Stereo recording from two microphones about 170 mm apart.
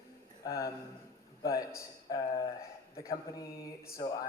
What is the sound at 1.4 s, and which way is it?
A man's voice, 20° left (ahead or behind).